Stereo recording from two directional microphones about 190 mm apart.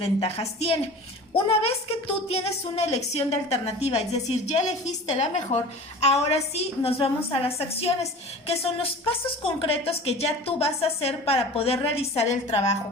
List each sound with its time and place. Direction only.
0.0 s a woman's voice: 30° left (ahead or behind)
8.4 s a woman's voice: 30° left (ahead or behind)